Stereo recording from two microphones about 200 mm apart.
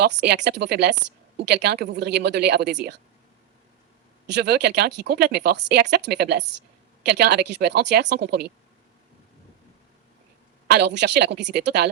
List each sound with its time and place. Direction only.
0.0 s speech: 55° right (ahead or behind)
4.3 s speech: 55° right (ahead or behind)
10.7 s speech: 55° right (ahead or behind)